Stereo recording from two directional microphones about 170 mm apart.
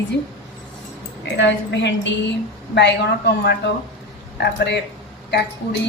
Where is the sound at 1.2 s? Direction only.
90° left.